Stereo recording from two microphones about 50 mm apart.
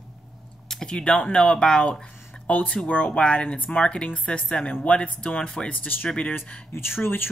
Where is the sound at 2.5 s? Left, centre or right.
Left.